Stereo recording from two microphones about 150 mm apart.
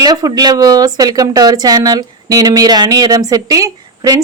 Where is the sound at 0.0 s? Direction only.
25° right (ahead or behind).